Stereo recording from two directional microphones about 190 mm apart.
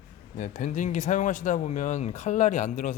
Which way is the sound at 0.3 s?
40° left (ahead or behind).